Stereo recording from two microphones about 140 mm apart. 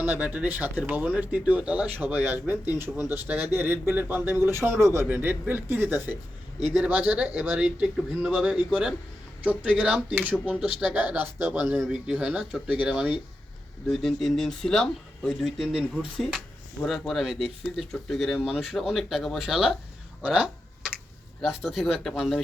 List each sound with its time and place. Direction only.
0.0 s speech: 10° right (ahead or behind)